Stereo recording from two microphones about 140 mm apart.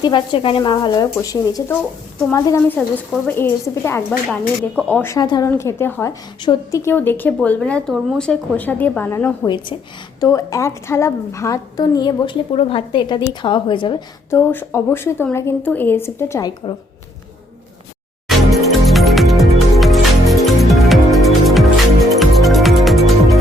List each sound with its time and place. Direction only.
0.0 s a woman's voice: 35° left (ahead or behind); by 5.0 s 10° left (ahead or behind)
5.0 s a woman's voice: 25° left (ahead or behind)
14.3 s a woman's voice: 15° left (ahead or behind)
18.3 s music: centre (ahead or behind)